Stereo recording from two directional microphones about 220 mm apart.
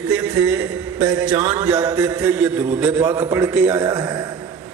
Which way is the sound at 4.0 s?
20° right (ahead or behind).